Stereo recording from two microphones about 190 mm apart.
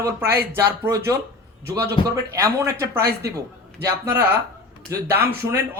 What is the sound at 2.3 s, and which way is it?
Speech, 15° right (ahead or behind).